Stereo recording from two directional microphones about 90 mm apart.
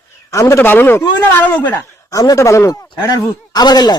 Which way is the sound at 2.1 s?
40° left (ahead or behind).